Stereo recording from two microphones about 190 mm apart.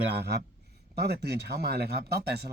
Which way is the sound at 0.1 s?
60° right (ahead or behind).